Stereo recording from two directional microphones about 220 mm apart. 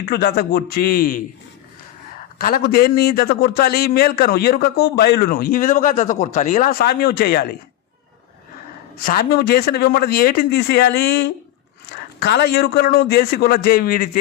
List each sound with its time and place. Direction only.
0.0 s a man's voice: 45° left (ahead or behind)
2.4 s a man's voice: 40° left (ahead or behind)
9.0 s a man's voice: 40° left (ahead or behind)